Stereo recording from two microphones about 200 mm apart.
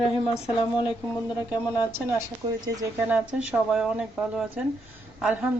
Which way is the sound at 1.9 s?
10° right (ahead or behind).